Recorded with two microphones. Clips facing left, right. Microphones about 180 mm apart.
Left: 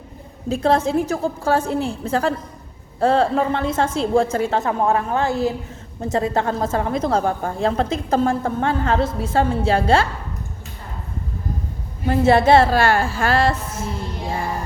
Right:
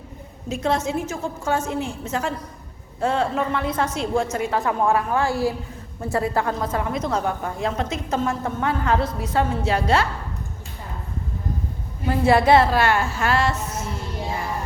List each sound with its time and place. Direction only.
0.4 s a woman's voice: 30° left (ahead or behind)
12.2 s a woman's voice: 25° left (ahead or behind)